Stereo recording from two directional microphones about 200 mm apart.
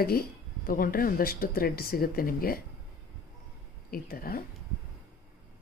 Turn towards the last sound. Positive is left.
turn(degrees=45)  # may be behind; listen again after turning